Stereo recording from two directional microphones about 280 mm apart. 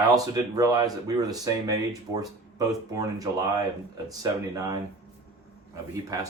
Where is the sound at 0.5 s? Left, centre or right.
Centre.